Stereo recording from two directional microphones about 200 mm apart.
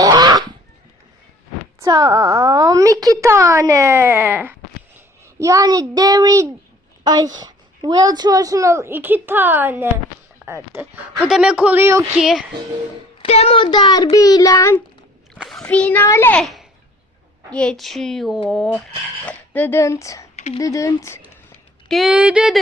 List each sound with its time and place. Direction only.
0.0 s fowl: 20° right (ahead or behind)
1.8 s a woman's voice: 20° right (ahead or behind)
13.2 s a child's voice: 30° left (ahead or behind)
15.4 s a child's voice: centre (ahead or behind)
20.3 s a sound: 35° left (ahead or behind)
20.6 s a child's voice: 15° left (ahead or behind)
21.8 s a woman's voice: centre (ahead or behind)